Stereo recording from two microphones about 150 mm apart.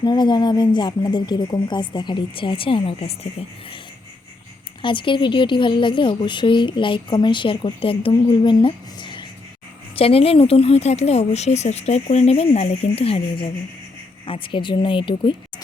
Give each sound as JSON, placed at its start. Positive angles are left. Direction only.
{"t": 0.0, "sound": "a woman's voice", "side_deg": 30}
{"t": 4.8, "sound": "a woman's voice", "side_deg": 35}
{"t": 14.3, "sound": "a woman's voice", "side_deg": 35}